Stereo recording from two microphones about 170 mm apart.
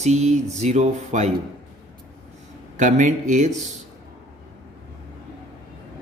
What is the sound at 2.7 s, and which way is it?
Speech, 45° right (ahead or behind).